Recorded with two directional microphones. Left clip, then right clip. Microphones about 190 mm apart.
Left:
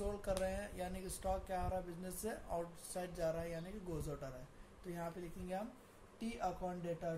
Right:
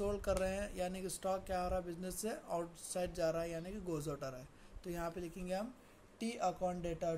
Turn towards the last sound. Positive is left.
turn(degrees=-55)  # may be behind; listen again after turning